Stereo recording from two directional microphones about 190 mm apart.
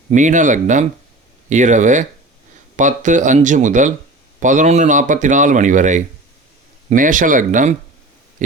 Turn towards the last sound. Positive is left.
turn(degrees=-45)  # may be behind; listen again after turning